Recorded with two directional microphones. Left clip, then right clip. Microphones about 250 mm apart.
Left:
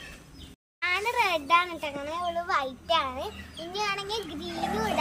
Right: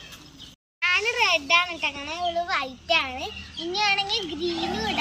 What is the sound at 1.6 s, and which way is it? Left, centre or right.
Speech, left.